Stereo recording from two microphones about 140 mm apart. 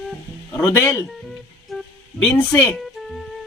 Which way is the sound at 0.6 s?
20° left (ahead or behind).